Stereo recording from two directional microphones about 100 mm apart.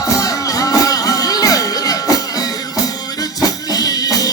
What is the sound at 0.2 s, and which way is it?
Music, 35° left (ahead or behind).